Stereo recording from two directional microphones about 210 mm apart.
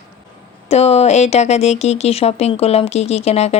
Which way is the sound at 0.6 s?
30° left (ahead or behind).